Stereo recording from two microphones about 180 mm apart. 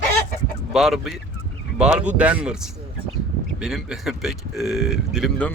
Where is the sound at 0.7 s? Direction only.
Centre (ahead or behind).